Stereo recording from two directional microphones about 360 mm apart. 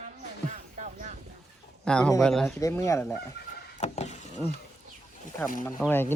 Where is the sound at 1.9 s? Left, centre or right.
Centre.